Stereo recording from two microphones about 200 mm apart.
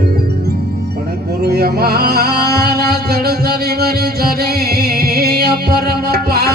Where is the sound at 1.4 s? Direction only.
50° right (ahead or behind).